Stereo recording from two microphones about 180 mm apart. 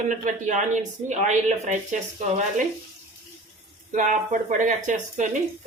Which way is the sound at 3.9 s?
45° right (ahead or behind).